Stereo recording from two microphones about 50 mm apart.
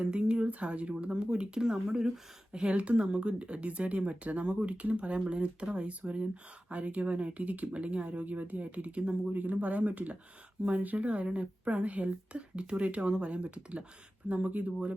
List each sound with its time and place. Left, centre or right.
0.0 s speech: right